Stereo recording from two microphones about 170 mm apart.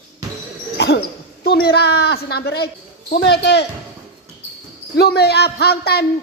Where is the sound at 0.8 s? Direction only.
75° left (ahead or behind).